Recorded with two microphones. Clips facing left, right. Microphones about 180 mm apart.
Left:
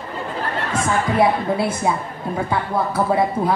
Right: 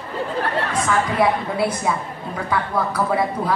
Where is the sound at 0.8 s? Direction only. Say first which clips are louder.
Left 2 dB; 25° left (ahead or behind).